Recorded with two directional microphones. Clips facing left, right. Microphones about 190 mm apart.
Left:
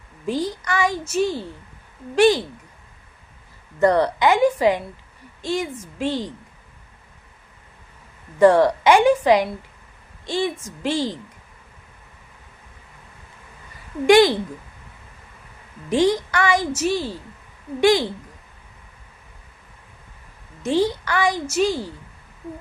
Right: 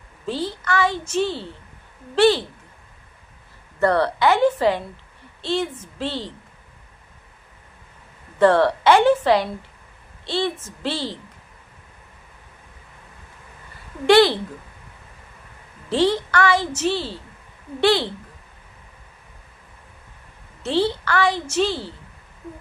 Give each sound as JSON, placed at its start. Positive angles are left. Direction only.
{"t": 0.3, "sound": "a woman's voice", "side_deg": 15}
{"t": 3.8, "sound": "a woman's voice", "side_deg": 20}
{"t": 8.4, "sound": "a woman's voice", "side_deg": 15}
{"t": 14.1, "sound": "a woman's voice", "side_deg": 15}
{"t": 15.9, "sound": "a woman's voice", "side_deg": 15}
{"t": 20.6, "sound": "a woman's voice", "side_deg": 15}